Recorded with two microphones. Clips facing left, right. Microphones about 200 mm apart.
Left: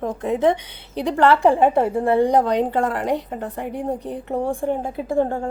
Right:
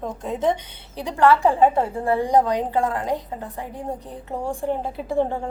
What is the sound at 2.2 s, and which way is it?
A woman's voice, 65° left (ahead or behind).